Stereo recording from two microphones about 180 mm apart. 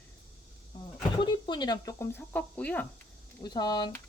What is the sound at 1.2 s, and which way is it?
Speech, 25° left (ahead or behind).